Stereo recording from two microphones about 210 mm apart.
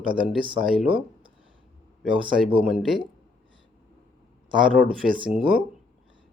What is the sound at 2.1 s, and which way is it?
Speech, 25° right (ahead or behind).